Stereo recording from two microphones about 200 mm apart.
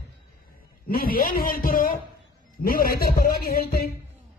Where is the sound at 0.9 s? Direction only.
45° left (ahead or behind).